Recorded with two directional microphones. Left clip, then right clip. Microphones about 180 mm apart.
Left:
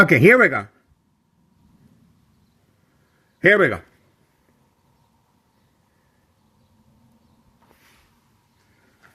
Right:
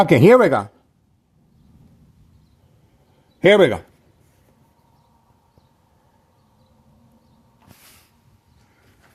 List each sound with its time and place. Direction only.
0.1 s speech: 20° right (ahead or behind)
3.4 s speech: 20° right (ahead or behind)